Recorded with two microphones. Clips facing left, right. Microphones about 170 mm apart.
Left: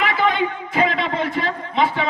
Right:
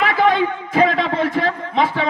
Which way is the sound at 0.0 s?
40° right (ahead or behind).